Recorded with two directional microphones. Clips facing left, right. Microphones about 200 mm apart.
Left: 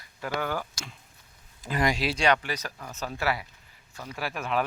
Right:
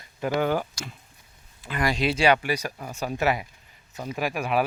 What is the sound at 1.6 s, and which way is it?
Speech, 40° left (ahead or behind).